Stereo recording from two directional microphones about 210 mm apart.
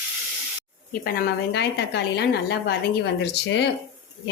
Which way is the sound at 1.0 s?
50° left (ahead or behind).